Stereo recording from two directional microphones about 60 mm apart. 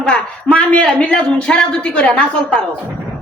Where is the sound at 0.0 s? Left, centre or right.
Centre.